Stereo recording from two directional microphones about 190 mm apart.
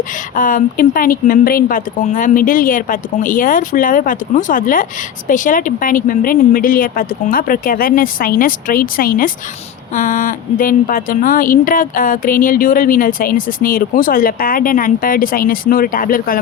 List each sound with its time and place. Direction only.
0.3 s a woman's voice: 45° left (ahead or behind)